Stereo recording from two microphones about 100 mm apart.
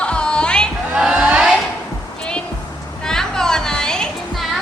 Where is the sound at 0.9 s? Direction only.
10° right (ahead or behind).